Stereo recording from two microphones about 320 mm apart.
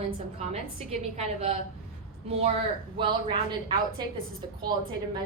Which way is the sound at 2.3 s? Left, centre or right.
Centre.